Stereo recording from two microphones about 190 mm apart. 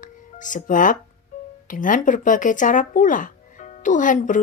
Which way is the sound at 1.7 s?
45° left (ahead or behind).